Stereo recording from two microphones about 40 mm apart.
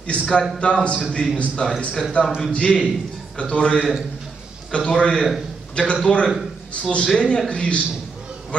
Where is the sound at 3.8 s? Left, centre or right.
Centre.